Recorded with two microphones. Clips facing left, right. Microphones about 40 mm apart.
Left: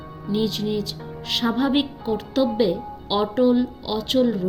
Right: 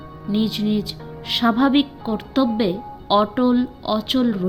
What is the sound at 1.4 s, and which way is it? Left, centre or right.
Speech, right.